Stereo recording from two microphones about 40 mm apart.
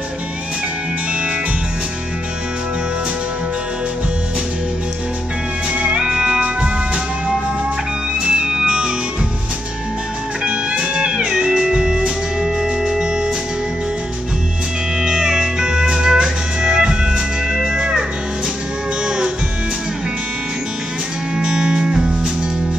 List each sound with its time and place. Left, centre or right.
5.8 s music: right
8.2 s music: centre
10.4 s music: right
15.0 s music: centre
19.0 s music: right
21.4 s music: right